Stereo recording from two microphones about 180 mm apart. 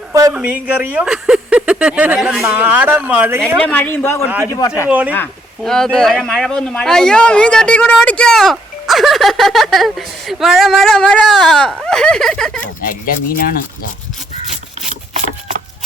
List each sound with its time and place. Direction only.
0.1 s a sound: 20° right (ahead or behind)
0.3 s speech: 10° right (ahead or behind)
3.6 s speech: 10° left (ahead or behind)
4.9 s speech: 10° right (ahead or behind)
5.1 s speech: 5° left (ahead or behind)
12.8 s speech: 50° left (ahead or behind)